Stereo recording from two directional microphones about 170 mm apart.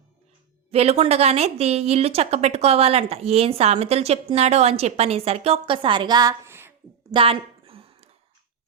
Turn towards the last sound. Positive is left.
turn(degrees=-30)  # may be behind; listen again after turning